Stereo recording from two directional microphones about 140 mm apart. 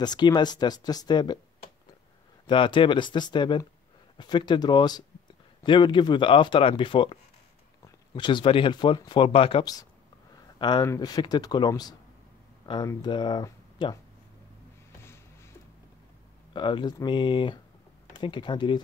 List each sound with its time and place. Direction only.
0.0 s speech: 30° left (ahead or behind)
2.4 s speech: 35° left (ahead or behind)
15.0 s music: 20° left (ahead or behind)
16.5 s speech: 35° left (ahead or behind)